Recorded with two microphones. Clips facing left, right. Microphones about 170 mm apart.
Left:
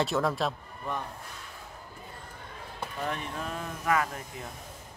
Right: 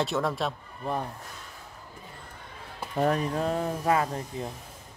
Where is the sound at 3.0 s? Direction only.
40° right (ahead or behind).